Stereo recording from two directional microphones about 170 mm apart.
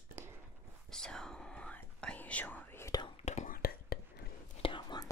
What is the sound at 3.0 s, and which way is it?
Whispering, 40° left (ahead or behind).